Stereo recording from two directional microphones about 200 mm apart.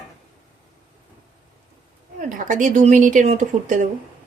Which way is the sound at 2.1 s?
40° right (ahead or behind).